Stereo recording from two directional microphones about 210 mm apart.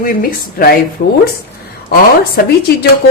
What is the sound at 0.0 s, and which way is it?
A woman's voice, 45° left (ahead or behind).